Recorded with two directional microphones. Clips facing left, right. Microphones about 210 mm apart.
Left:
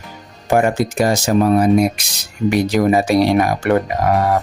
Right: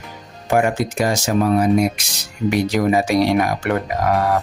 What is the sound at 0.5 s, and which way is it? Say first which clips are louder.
Speech: left 2 dB; 40° left (ahead or behind).